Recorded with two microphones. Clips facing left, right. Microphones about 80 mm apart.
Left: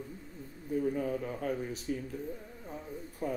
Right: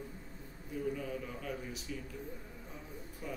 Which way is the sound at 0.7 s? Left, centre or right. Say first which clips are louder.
Left 6 dB; left.